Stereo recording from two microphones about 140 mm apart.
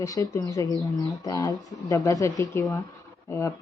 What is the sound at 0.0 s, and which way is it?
Speech, 25° left (ahead or behind).